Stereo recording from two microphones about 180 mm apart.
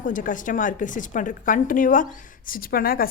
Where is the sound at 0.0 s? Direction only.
45° left (ahead or behind).